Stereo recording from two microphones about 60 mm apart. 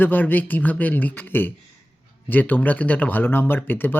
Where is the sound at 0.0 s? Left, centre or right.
Left.